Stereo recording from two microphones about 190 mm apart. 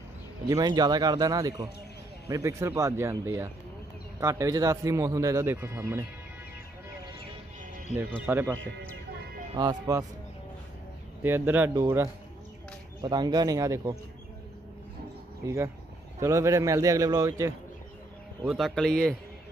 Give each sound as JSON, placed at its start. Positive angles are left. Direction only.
{"t": 0.5, "sound": "speech", "side_deg": -20}
{"t": 8.3, "sound": "speech", "side_deg": -10}
{"t": 9.6, "sound": "speech", "side_deg": -20}
{"t": 11.2, "sound": "speech", "side_deg": -10}
{"t": 15.4, "sound": "speech", "side_deg": -15}
{"t": 18.5, "sound": "speech", "side_deg": 0}